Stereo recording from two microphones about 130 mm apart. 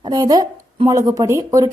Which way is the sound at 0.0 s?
30° right (ahead or behind).